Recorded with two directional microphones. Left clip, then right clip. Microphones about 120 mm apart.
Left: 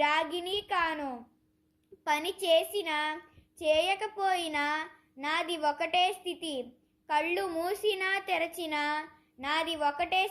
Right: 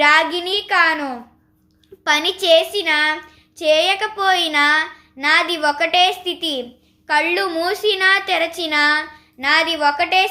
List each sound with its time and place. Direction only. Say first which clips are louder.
0.0 s a woman's voice: right 14 dB; 40° left (ahead or behind)